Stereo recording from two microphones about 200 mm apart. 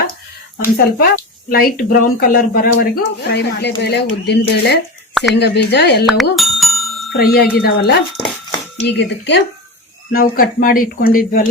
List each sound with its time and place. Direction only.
0.6 s speech: 50° left (ahead or behind)
6.3 s bicycle bell: centre (ahead or behind)
7.2 s speech: 50° left (ahead or behind)
10.1 s speech: 45° left (ahead or behind)